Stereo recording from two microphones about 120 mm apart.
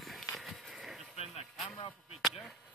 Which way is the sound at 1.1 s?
60° left (ahead or behind).